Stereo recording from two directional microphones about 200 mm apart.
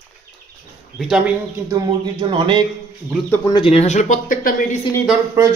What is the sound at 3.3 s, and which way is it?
Speech, 20° left (ahead or behind).